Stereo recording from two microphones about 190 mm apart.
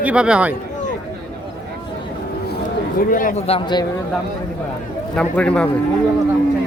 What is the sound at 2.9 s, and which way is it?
Speech, 45° left (ahead or behind).